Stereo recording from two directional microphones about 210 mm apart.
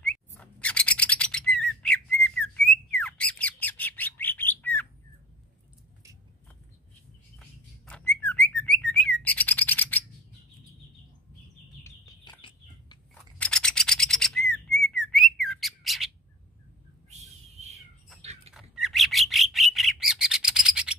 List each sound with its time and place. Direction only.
0.0 s bird: 5° left (ahead or behind)
1.8 s squawk: 5° left (ahead or behind)
7.3 s a sound: 5° left (ahead or behind)
8.2 s bird: 5° left (ahead or behind)
11.8 s bird: 25° left (ahead or behind)
13.1 s rub: 5° left (ahead or behind)
14.8 s bird: 5° left (ahead or behind)
17.1 s a sound: 30° right (ahead or behind)
18.2 s dog: 30° right (ahead or behind)
18.5 s bird: centre (ahead or behind)